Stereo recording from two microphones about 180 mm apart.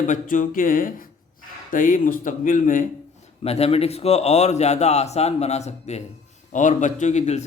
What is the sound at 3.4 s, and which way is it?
A man's voice, 35° left (ahead or behind).